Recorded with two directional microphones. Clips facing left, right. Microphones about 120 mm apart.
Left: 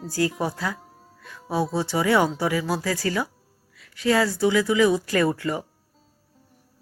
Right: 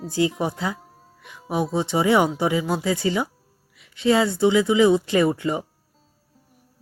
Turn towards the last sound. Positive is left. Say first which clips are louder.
# right 2 dB
turn(degrees=-20)  # may be behind; listen again after turning